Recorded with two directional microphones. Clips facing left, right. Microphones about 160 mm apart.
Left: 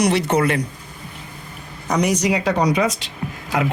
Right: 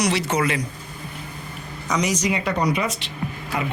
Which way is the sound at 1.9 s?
60° left (ahead or behind).